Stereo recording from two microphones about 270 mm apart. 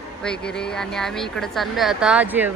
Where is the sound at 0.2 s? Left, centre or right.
Centre.